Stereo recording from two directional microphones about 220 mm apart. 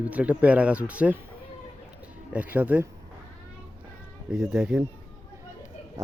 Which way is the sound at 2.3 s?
5° right (ahead or behind).